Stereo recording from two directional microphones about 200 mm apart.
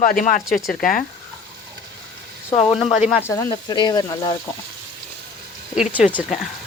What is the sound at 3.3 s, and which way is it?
Speech, 20° left (ahead or behind).